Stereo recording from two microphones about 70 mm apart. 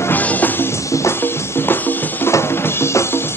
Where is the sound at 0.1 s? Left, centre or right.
Left.